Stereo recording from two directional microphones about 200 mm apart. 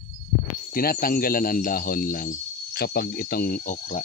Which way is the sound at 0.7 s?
45° left (ahead or behind).